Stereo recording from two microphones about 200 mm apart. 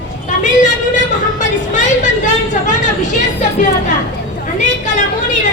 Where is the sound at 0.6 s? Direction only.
40° left (ahead or behind).